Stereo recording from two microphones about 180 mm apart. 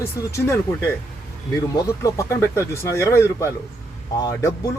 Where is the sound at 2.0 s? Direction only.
15° left (ahead or behind).